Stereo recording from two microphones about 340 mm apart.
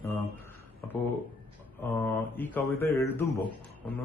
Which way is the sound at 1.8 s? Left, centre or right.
Centre.